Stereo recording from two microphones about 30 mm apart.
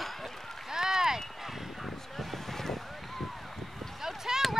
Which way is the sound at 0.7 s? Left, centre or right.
Centre.